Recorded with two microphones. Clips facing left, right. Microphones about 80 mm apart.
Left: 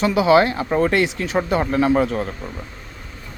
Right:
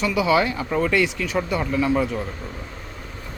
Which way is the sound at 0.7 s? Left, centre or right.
Left.